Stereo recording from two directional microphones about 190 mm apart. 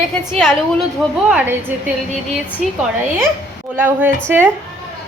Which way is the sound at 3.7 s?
10° right (ahead or behind).